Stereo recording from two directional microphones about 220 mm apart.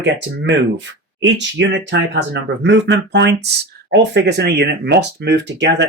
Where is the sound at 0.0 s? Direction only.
55° right (ahead or behind).